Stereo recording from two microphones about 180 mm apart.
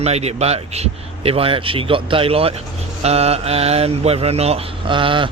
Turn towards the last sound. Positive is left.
turn(degrees=-25)  # may be behind; listen again after turning